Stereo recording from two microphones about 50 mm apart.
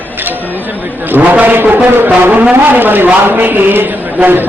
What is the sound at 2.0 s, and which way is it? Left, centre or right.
A man's voice, right.